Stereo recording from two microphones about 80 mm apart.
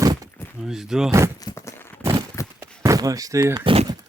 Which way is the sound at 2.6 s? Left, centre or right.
Right.